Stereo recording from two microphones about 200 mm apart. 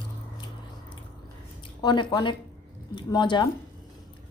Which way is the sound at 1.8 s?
20° left (ahead or behind).